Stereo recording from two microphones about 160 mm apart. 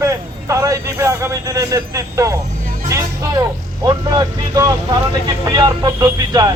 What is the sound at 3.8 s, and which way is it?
Speech, 25° right (ahead or behind).